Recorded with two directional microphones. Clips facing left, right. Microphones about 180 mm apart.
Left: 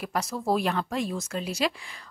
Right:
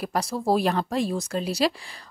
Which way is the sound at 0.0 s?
35° right (ahead or behind).